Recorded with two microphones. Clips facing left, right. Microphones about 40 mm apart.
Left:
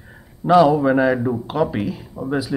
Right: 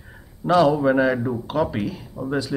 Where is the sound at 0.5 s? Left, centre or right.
Centre.